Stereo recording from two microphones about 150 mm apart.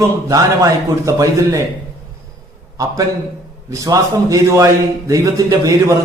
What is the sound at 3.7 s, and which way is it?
A man's voice, 20° right (ahead or behind).